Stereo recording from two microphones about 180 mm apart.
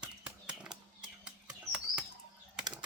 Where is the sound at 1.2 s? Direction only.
5° right (ahead or behind).